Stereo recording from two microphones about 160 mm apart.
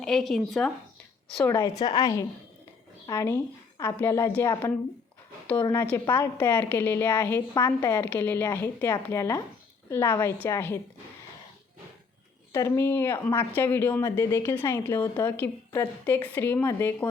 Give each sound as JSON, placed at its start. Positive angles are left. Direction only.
{"t": 0.0, "sound": "speech", "side_deg": 0}
{"t": 1.5, "sound": "a woman's voice", "side_deg": 25}
{"t": 12.5, "sound": "a woman's voice", "side_deg": 15}